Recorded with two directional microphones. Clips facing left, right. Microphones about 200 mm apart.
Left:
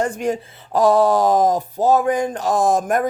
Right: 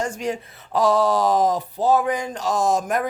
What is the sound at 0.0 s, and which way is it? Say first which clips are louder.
Speech: left 5 dB; 55° left (ahead or behind).